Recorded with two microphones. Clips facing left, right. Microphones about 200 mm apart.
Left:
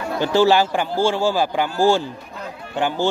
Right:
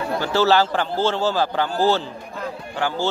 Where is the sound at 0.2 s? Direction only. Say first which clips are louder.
Left 3 dB; 15° left (ahead or behind).